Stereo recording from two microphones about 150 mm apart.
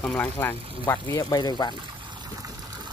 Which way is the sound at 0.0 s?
10° left (ahead or behind).